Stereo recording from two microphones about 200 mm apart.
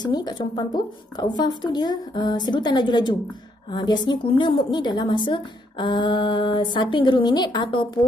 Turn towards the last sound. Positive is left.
turn(degrees=25)  # may be behind; listen again after turning